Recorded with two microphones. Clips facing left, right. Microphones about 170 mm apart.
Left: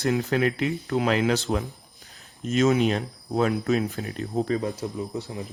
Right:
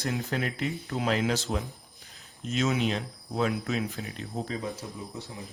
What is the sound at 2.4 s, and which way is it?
Speech, 50° left (ahead or behind).